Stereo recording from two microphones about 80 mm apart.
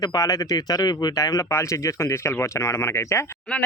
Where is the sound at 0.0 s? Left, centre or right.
Left.